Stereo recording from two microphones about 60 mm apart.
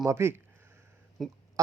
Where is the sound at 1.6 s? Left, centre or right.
Right.